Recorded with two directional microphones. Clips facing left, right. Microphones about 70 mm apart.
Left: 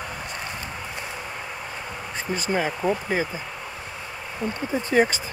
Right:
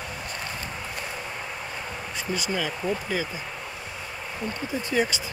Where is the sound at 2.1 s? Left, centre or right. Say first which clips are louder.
Left 4 dB; left.